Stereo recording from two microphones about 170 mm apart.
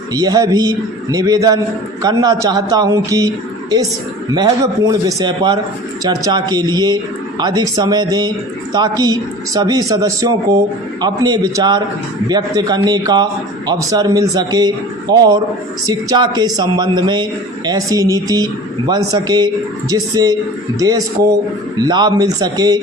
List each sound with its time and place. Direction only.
0.1 s speech: 20° right (ahead or behind)